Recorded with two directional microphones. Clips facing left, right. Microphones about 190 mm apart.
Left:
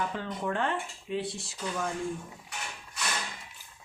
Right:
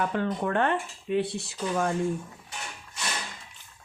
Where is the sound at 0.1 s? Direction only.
60° right (ahead or behind).